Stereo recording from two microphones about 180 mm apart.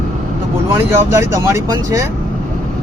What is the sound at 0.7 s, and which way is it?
Speech, 15° right (ahead or behind).